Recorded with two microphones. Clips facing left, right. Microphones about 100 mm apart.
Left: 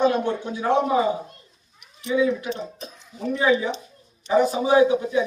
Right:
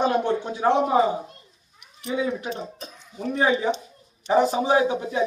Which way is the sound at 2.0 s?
35° right (ahead or behind).